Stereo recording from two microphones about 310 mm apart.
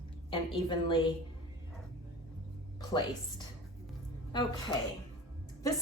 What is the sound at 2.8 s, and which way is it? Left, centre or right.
Speech, centre.